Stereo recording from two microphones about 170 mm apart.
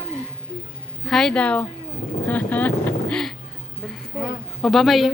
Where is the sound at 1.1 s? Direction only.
5° left (ahead or behind).